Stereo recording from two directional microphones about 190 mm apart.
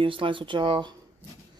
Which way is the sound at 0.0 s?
25° right (ahead or behind).